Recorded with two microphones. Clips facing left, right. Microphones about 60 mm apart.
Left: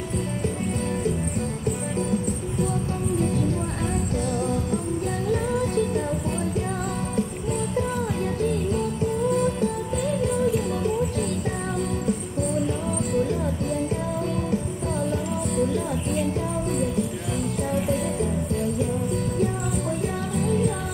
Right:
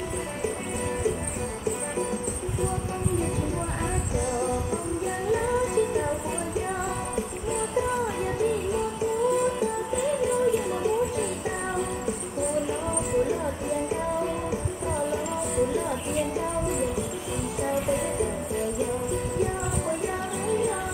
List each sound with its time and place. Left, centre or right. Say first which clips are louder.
5.3 s music: even; centre
8.4 s music: even; centre
13.1 s music: even; centre
15.5 s music: left 1 dB; centre
20.3 s music: left 3 dB; centre